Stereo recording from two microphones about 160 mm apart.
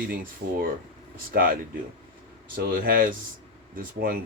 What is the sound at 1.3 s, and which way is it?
Speech, 80° right.